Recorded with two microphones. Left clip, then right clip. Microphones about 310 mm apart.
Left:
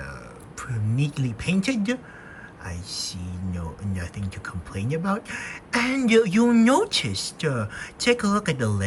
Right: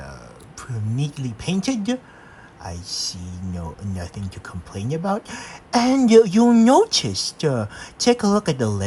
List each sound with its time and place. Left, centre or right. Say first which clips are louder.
0.6 s speech: even; centre